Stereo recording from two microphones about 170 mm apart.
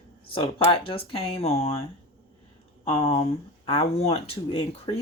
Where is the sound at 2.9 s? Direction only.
35° left (ahead or behind).